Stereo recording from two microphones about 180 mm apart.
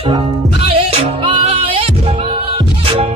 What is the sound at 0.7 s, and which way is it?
Music, 30° right (ahead or behind).